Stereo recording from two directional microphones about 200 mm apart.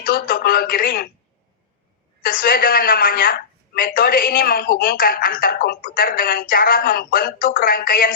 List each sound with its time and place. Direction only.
0.0 s speech: 45° left (ahead or behind)
2.2 s a woman's voice: 45° left (ahead or behind)